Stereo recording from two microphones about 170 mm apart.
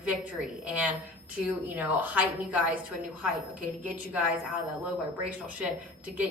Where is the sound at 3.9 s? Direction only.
10° right (ahead or behind).